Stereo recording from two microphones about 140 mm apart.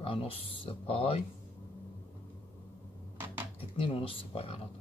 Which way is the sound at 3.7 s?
40° left (ahead or behind).